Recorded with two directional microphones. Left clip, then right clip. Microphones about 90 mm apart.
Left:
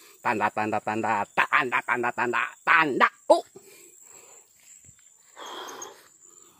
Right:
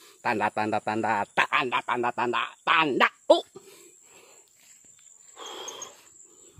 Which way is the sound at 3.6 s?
35° right (ahead or behind).